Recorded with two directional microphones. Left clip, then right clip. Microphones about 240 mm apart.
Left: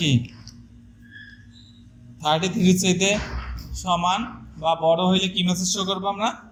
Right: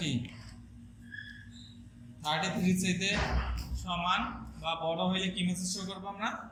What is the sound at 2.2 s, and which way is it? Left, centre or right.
A man's voice, left.